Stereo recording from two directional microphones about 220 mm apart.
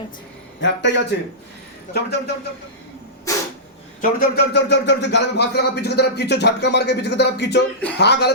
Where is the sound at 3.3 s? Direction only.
15° left (ahead or behind).